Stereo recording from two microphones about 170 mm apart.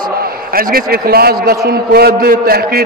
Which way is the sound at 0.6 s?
60° right (ahead or behind).